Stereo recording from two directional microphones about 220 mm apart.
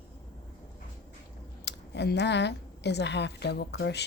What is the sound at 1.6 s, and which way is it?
A woman's voice, 50° left (ahead or behind).